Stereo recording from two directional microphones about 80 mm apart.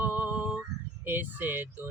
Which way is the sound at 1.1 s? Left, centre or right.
Right.